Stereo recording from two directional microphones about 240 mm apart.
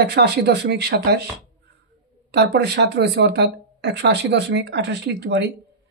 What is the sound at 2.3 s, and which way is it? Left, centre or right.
Speech, right.